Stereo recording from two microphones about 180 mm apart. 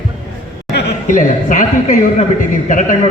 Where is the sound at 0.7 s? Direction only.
70° left (ahead or behind).